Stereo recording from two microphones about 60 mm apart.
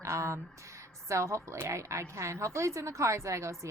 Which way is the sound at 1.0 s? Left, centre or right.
Right.